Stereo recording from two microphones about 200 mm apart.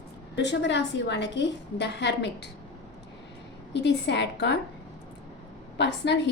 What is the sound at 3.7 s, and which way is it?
Speech, 60° left (ahead or behind).